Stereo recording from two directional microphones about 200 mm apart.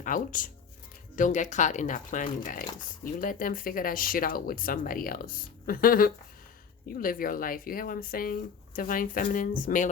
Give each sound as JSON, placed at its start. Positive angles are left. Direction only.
{"t": 0.0, "sound": "speech", "side_deg": 40}